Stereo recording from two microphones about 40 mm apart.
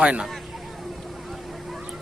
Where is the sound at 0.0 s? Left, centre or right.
Right.